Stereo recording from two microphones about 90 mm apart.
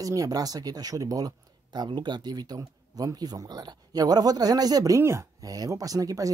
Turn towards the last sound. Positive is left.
turn(degrees=-40)  # may be behind; listen again after turning